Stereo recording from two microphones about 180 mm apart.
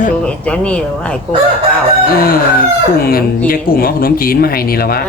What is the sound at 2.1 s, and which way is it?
Speech, 55° left (ahead or behind).